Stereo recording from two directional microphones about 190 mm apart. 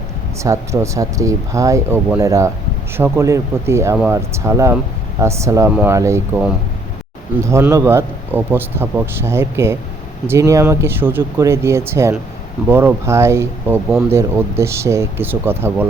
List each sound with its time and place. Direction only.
0.4 s a man's voice: 15° right (ahead or behind)
7.4 s a man's voice: 15° right (ahead or behind)